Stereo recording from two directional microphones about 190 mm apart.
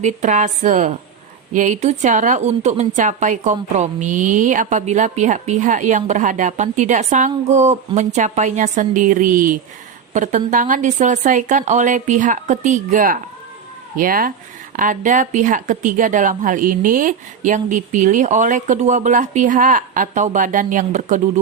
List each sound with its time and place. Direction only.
0.0 s a woman's voice: 40° right (ahead or behind)